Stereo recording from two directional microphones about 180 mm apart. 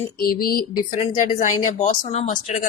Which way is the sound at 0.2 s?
55° left (ahead or behind).